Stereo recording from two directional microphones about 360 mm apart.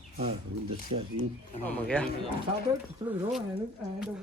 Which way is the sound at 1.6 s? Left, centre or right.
Centre.